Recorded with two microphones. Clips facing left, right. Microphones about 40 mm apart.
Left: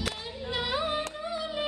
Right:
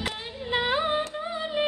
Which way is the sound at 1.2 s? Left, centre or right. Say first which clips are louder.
Right 4 dB; right.